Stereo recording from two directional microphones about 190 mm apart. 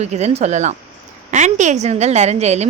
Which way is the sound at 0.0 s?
35° right (ahead or behind).